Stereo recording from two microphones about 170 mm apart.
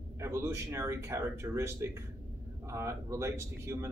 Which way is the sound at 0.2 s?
15° right (ahead or behind).